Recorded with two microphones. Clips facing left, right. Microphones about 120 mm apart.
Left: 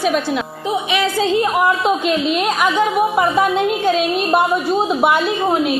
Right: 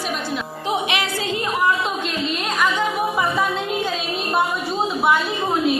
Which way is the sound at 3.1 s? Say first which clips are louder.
Left 6 dB; 70° left (ahead or behind).